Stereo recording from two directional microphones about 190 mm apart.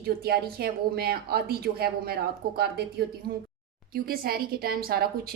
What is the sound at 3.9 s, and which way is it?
A woman's voice, 55° right (ahead or behind).